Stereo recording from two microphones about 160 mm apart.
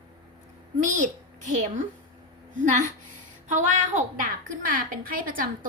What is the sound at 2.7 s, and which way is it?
A woman's voice, 50° right (ahead or behind).